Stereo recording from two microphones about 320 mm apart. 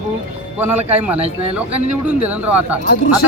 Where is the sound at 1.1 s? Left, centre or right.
Centre.